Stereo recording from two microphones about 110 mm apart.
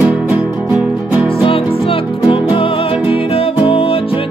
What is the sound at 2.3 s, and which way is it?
Music, 55° left (ahead or behind).